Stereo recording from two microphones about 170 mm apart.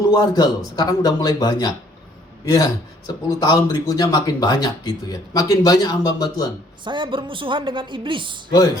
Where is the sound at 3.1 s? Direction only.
20° left (ahead or behind).